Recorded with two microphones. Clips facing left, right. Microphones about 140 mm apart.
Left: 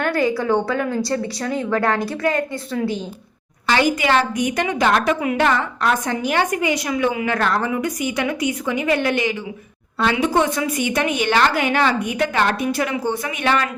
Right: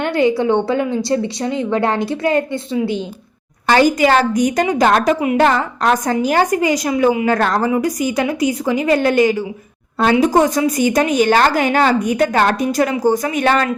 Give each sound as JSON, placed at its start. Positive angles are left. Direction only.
{"t": 0.0, "sound": "a woman's voice", "side_deg": -25}
{"t": 3.7, "sound": "a woman's voice", "side_deg": -40}